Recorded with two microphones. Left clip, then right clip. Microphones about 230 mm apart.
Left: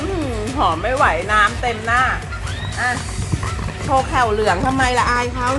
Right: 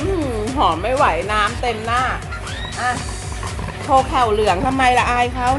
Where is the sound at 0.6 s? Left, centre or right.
Centre.